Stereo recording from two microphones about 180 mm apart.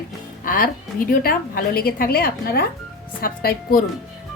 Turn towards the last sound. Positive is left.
turn(degrees=55)  # may be behind; listen again after turning